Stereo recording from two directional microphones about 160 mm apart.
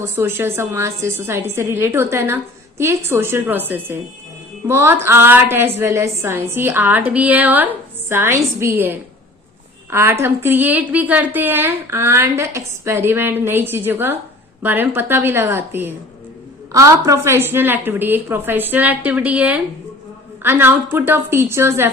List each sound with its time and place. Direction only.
0.0 s a woman's voice: 15° right (ahead or behind)